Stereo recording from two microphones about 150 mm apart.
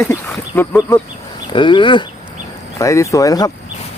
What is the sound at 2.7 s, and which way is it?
Speech, 20° left (ahead or behind).